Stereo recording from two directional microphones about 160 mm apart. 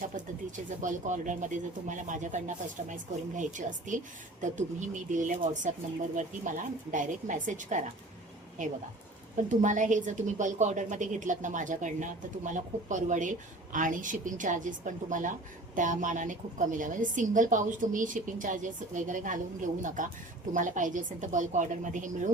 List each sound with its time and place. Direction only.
0.5 s a woman's voice: 50° right (ahead or behind)